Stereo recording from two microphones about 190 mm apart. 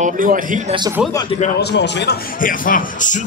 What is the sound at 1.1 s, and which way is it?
Speech, 20° left (ahead or behind).